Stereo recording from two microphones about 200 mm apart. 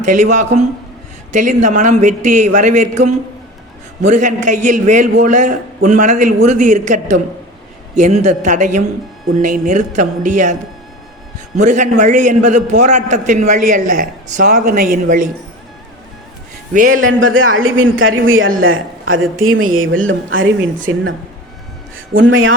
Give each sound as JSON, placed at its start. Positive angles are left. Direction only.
{"t": 0.0, "sound": "a man's voice", "side_deg": -40}
{"t": 16.7, "sound": "a man's voice", "side_deg": -40}
{"t": 17.0, "sound": "a man's voice", "side_deg": -80}
{"t": 22.2, "sound": "speech", "side_deg": -75}